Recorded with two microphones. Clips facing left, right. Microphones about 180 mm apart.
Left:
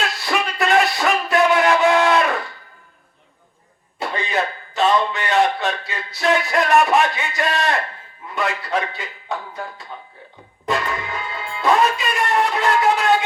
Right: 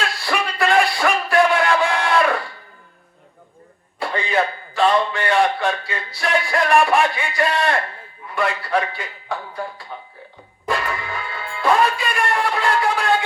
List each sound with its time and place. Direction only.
0.0 s music: 20° left (ahead or behind)
4.0 s a sound: 20° left (ahead or behind)
8.4 s a man's voice: 20° left (ahead or behind)
10.7 s music: 20° left (ahead or behind)